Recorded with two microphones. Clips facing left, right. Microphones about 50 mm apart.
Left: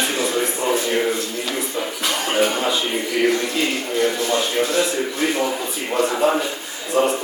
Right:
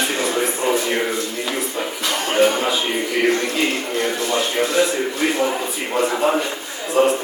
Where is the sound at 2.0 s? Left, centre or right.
Centre.